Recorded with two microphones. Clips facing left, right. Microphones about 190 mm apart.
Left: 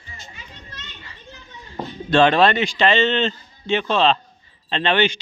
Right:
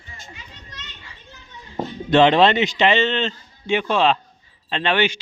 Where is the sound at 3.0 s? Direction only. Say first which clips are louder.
Left 2 dB; centre (ahead or behind).